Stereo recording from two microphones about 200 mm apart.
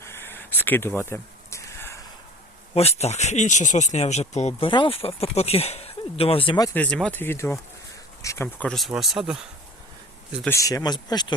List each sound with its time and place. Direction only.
0.0 s a sound: 10° left (ahead or behind)
2.7 s speech: 30° left (ahead or behind)
6.7 s speech: 5° left (ahead or behind)
10.4 s speech: 15° left (ahead or behind)